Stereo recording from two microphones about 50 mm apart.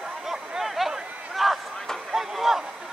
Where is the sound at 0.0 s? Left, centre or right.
Centre.